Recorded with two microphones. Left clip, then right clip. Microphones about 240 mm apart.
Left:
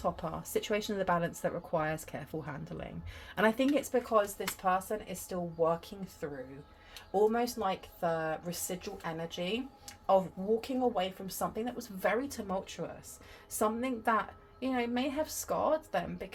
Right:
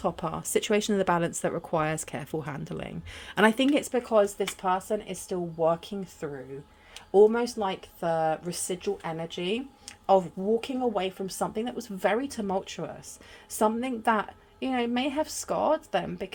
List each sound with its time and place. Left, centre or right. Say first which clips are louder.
0.0 s speech: right 5 dB; right